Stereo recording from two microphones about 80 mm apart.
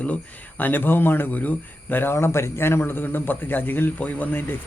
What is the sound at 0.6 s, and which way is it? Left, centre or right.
Speech, left.